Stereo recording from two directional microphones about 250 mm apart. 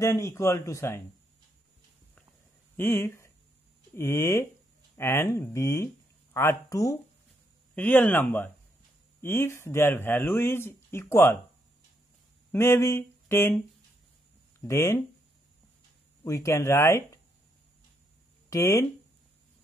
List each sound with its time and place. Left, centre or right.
0.0 s speech: centre
2.8 s speech: centre
12.5 s a sound: centre
14.6 s speech: centre
16.3 s speech: centre
18.5 s speech: centre